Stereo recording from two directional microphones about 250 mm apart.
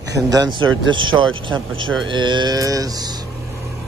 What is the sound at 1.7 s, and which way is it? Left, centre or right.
Speech, right.